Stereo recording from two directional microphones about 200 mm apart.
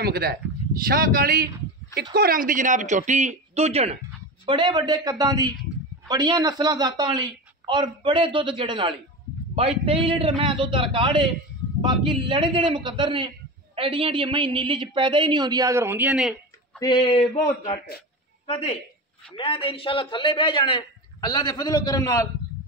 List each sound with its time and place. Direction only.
0.0 s a woman's voice: 50° right (ahead or behind); by 16.8 s 5° right (ahead or behind)
16.8 s a man's voice: 25° left (ahead or behind)